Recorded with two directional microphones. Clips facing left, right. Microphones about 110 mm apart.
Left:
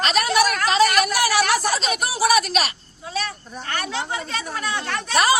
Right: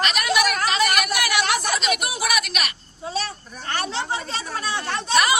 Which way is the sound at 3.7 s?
30° right (ahead or behind).